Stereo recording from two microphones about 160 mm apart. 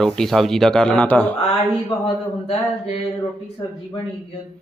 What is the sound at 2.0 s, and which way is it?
Speech, 35° left (ahead or behind).